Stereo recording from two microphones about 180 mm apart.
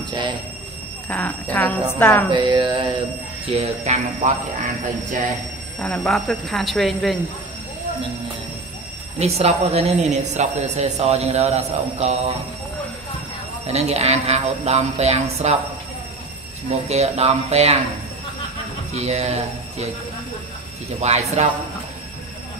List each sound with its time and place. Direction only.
0.1 s speech: 25° right (ahead or behind)
1.0 s speech: 10° left (ahead or behind)
2.3 s a sound: 25° right (ahead or behind)
3.4 s a woman's voice: 35° right (ahead or behind)
5.8 s speech: 5° left (ahead or behind)
9.2 s a woman's voice: 35° right (ahead or behind)
13.7 s a woman's voice: 35° right (ahead or behind)
16.9 s a woman's voice: 35° right (ahead or behind)
18.9 s a woman's voice: 35° right (ahead or behind)
21.0 s a woman's voice: 40° right (ahead or behind)